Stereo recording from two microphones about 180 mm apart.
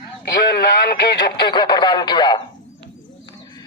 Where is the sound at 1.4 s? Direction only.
25° left (ahead or behind).